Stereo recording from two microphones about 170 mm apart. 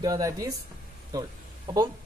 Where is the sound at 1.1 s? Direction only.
20° right (ahead or behind).